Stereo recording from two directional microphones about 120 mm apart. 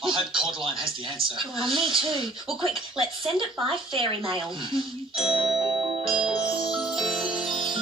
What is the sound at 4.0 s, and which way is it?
Speech, 45° right (ahead or behind).